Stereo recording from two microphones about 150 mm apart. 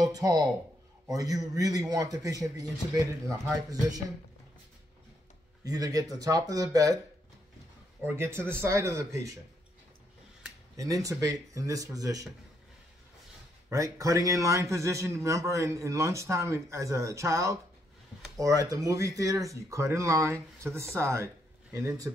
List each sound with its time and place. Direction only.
0.0 s a man's voice: 25° right (ahead or behind)
5.6 s a man's voice: 25° right (ahead or behind)
8.0 s speech: 15° right (ahead or behind)
10.8 s a man's voice: 20° right (ahead or behind)
13.7 s a man's voice: 20° right (ahead or behind)